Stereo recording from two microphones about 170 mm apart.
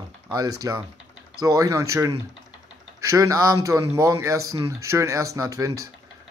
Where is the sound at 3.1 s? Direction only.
20° right (ahead or behind).